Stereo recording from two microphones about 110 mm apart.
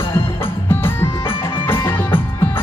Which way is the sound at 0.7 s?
20° left (ahead or behind).